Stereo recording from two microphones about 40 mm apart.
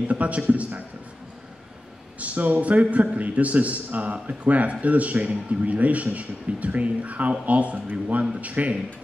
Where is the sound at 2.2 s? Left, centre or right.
Right.